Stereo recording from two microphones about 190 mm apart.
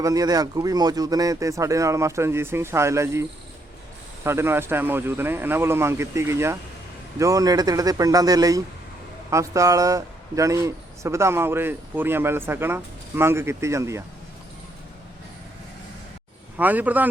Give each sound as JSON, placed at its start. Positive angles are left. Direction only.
{"t": 0.0, "sound": "speech", "side_deg": -20}
{"t": 16.6, "sound": "speech", "side_deg": -10}